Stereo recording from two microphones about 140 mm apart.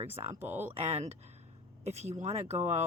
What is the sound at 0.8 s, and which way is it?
Speech, 50° right (ahead or behind).